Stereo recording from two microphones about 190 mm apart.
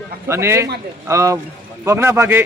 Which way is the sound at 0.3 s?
15° right (ahead or behind).